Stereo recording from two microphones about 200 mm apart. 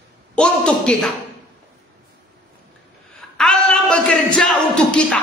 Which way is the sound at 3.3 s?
5° left (ahead or behind).